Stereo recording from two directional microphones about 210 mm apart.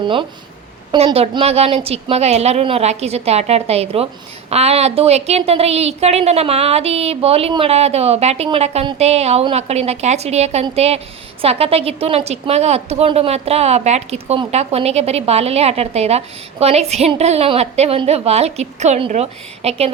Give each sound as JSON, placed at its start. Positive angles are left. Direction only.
{"t": 0.0, "sound": "a woman's voice", "side_deg": -25}